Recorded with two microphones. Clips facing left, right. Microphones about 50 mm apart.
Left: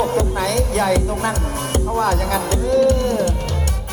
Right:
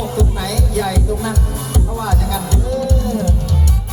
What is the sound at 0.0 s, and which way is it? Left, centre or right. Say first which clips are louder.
Music: left 2 dB; left.